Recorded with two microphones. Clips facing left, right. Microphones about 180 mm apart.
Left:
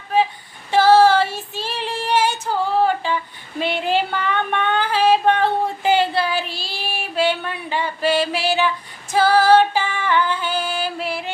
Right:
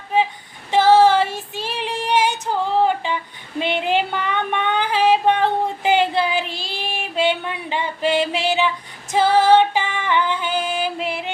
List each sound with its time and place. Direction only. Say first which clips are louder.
0.7 s child singing: even; 20° right (ahead or behind)
2.8 s a sound: even; 20° right (ahead or behind)
3.6 s female singing: even; 20° right (ahead or behind)
9.1 s music: even; 20° right (ahead or behind)